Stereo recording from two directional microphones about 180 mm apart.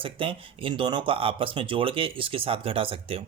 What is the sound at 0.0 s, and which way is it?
Speech, 30° right (ahead or behind).